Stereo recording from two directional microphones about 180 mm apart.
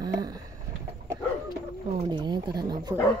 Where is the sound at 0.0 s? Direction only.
20° right (ahead or behind).